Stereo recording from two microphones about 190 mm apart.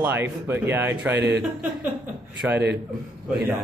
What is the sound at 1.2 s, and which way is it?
Speech, 65° right (ahead or behind).